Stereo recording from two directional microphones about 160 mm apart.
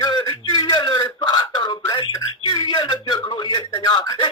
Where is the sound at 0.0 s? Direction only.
25° left (ahead or behind).